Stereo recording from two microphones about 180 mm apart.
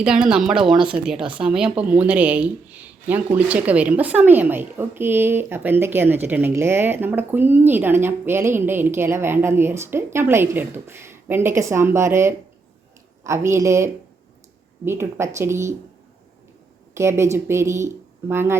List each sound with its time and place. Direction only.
0.0 s speech: 5° right (ahead or behind)
16.9 s speech: 15° right (ahead or behind)